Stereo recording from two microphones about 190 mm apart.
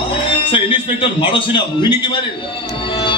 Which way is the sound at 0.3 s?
30° left (ahead or behind).